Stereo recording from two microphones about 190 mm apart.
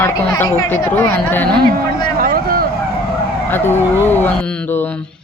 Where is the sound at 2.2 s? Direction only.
50° right (ahead or behind).